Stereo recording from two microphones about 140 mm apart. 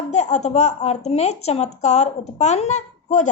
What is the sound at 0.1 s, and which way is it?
A woman's voice, 55° left (ahead or behind).